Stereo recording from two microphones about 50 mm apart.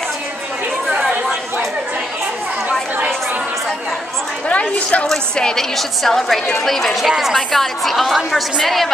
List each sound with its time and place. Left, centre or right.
0.8 s chatter: centre
4.5 s a woman's voice: left
5.0 s a woman's voice: centre